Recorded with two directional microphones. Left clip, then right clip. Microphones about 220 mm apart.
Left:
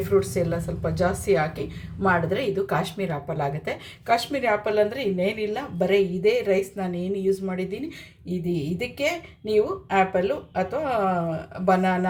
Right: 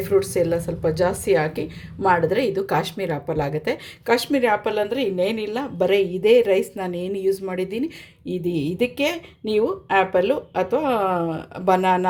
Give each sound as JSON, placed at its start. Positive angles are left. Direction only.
{"t": 0.1, "sound": "a woman's voice", "side_deg": -45}